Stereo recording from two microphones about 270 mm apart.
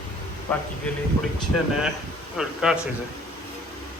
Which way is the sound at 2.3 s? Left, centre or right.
Centre.